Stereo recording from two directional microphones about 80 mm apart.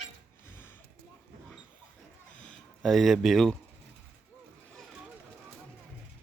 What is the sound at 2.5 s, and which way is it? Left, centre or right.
Speech, centre.